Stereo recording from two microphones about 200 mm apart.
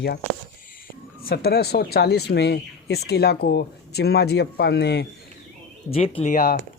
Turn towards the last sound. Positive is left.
turn(degrees=45)  # may be behind; listen again after turning